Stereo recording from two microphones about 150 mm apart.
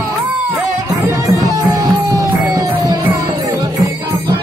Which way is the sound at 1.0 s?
20° right (ahead or behind).